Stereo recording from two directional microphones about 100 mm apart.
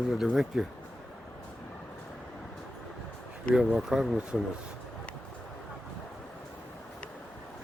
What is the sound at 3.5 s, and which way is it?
Speech, 5° right (ahead or behind).